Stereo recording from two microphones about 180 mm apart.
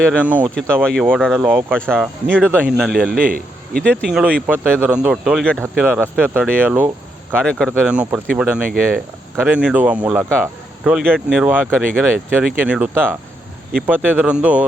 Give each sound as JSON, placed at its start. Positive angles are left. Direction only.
{"t": 0.2, "sound": "speech", "side_deg": -10}
{"t": 0.8, "sound": "speech", "side_deg": 0}
{"t": 2.3, "sound": "speech", "side_deg": -10}
{"t": 3.2, "sound": "a man's voice", "side_deg": -50}
{"t": 3.8, "sound": "speech", "side_deg": -5}